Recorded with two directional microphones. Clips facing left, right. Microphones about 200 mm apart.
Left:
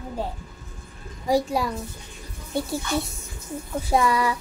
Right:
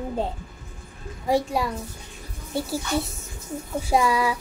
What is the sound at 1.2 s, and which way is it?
Speech, centre (ahead or behind).